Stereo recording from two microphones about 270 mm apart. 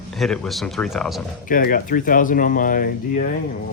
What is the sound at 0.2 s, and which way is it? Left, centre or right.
Speech, centre.